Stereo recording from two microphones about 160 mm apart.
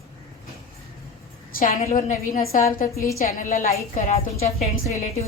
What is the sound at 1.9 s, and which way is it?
Speech, 55° left (ahead or behind).